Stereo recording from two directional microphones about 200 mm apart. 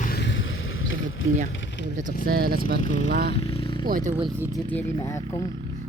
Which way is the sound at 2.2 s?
45° right (ahead or behind).